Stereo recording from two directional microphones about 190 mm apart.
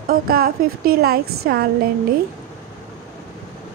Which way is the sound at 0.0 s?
50° right (ahead or behind).